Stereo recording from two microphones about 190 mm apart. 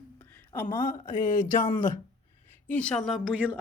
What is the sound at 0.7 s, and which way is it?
Speech, 20° left (ahead or behind).